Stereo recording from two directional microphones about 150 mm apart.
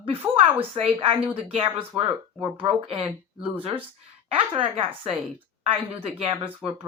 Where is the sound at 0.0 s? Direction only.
40° right (ahead or behind).